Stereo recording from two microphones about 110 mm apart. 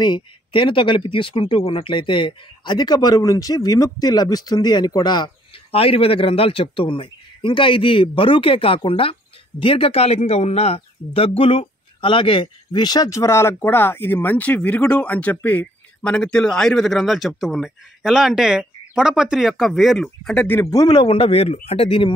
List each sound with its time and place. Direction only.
0.0 s speech: 45° left (ahead or behind)
5.7 s speech: 60° left (ahead or behind)
11.2 s speech: 55° left (ahead or behind); by 20.3 s centre (ahead or behind)
20.3 s speech: 20° left (ahead or behind)
20.7 s speech: 40° left (ahead or behind)
21.1 s speech: 60° left (ahead or behind)